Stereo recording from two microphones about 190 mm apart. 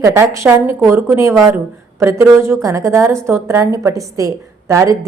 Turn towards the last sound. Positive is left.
turn(degrees=-15)  # may be behind; listen again after turning